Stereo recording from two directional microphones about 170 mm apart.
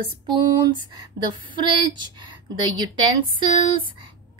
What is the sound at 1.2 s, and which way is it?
Speech, 90° right.